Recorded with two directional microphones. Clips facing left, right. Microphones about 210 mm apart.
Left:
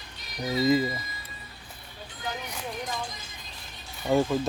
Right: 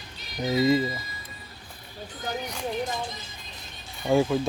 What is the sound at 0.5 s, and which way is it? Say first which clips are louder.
Speech: right 1 dB; centre (ahead or behind).